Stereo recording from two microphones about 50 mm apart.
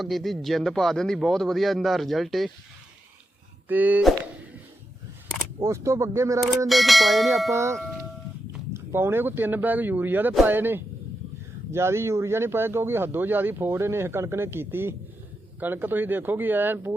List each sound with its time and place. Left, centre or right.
0.0 s speech: centre
3.7 s speech: right
5.5 s speech: right
6.7 s speech: centre
7.5 s speech: right
8.7 s speech: right
11.7 s speech: right